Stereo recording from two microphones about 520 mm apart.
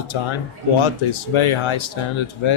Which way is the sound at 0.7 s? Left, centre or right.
Left.